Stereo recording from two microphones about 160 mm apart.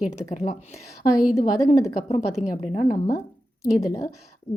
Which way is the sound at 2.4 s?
45° left (ahead or behind).